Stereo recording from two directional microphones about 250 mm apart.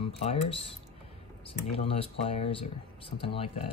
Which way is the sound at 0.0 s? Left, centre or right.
Left.